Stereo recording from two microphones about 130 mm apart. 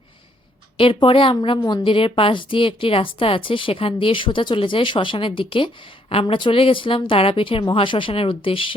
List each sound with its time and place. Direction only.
0.8 s a woman's voice: 45° left (ahead or behind)